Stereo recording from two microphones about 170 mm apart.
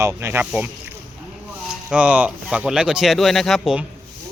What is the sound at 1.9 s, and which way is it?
Speech, 5° right (ahead or behind).